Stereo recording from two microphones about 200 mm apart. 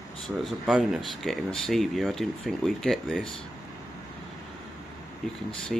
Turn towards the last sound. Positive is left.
turn(degrees=0)  # may be behind; listen again after turning